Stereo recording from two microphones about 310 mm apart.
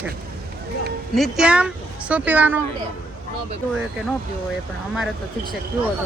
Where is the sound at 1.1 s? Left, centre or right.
Centre.